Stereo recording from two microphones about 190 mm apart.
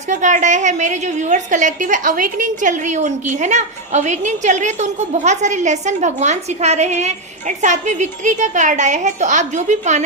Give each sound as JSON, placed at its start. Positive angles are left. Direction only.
{"t": 0.1, "sound": "a woman's voice", "side_deg": -40}